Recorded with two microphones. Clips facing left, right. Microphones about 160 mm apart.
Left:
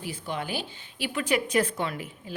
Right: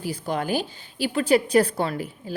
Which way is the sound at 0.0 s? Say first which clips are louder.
Right 6 dB; 40° right (ahead or behind).